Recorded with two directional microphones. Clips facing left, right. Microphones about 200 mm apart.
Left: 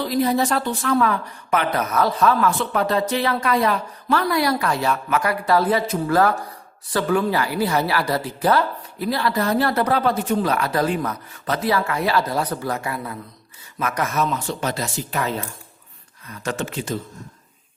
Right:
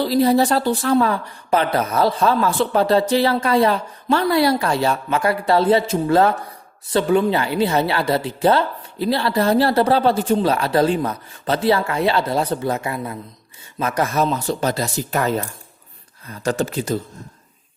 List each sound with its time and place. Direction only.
0.0 s a woman's voice: 30° right (ahead or behind)
16.3 s speech: 35° right (ahead or behind)